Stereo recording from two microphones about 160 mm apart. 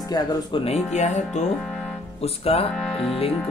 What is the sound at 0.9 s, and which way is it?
Speech, 45° left (ahead or behind).